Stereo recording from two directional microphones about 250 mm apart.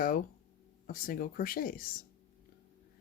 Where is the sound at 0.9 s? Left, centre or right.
Left.